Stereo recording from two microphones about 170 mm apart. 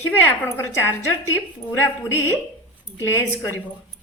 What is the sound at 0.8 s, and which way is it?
A woman's voice, 15° left (ahead or behind).